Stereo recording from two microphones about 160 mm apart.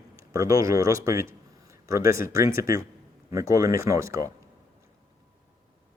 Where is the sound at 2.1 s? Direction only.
20° right (ahead or behind).